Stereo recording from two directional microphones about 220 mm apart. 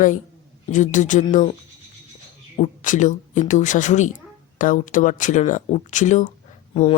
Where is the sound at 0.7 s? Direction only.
35° left (ahead or behind).